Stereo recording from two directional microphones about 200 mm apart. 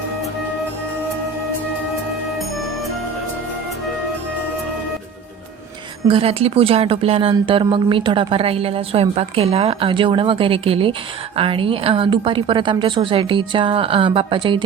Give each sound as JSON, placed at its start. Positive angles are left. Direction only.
{"t": 6.1, "sound": "speech", "side_deg": -30}